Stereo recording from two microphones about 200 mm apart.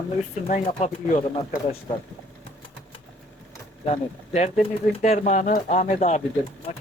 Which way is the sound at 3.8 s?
35° left (ahead or behind).